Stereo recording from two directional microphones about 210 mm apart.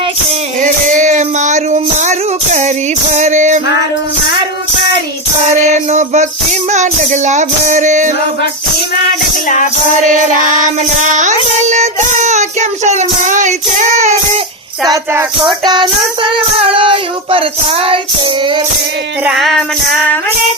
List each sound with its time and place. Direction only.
0.6 s music: 35° right (ahead or behind)
5.6 s music: 35° right (ahead or behind)
6.7 s child singing: 35° right (ahead or behind)
10.1 s child singing: 35° right (ahead or behind)
14.8 s child singing: 15° right (ahead or behind)
19.2 s music: centre (ahead or behind)